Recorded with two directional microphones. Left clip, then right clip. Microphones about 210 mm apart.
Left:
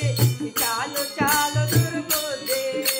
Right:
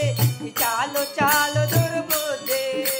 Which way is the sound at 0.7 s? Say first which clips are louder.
Right 5 dB; 45° right (ahead or behind).